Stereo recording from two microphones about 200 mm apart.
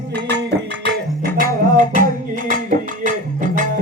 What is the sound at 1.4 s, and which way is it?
Music, 40° right (ahead or behind).